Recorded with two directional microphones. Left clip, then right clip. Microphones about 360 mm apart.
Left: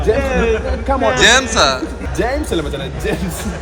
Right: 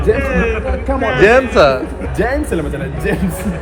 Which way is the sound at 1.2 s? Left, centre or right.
Centre.